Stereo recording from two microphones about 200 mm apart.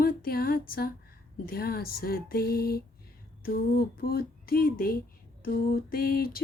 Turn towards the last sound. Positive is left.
turn(degrees=50)  # may be behind; listen again after turning